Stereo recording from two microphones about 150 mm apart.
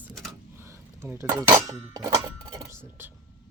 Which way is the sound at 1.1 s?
20° right (ahead or behind).